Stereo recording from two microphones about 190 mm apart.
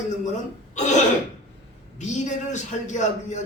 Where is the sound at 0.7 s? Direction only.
40° left (ahead or behind).